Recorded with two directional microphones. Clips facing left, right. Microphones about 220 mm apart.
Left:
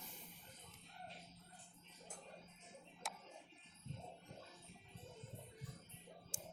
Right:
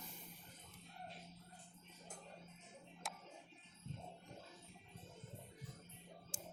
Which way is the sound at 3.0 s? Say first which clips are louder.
Even; centre (ahead or behind).